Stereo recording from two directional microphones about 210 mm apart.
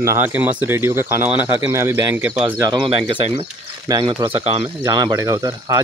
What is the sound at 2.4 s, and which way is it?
Speech, 20° right (ahead or behind).